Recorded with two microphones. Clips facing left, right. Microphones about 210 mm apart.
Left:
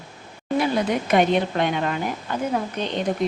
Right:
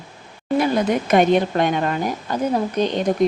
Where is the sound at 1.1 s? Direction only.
45° right (ahead or behind).